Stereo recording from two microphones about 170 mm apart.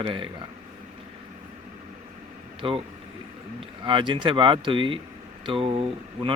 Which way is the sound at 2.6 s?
30° right (ahead or behind).